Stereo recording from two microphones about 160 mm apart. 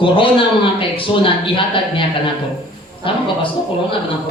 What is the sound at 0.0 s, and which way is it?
A man's voice, 35° left (ahead or behind).